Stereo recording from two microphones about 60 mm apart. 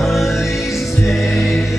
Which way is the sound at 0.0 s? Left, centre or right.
Centre.